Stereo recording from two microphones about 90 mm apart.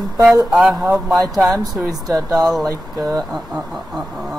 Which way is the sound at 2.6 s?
35° right (ahead or behind).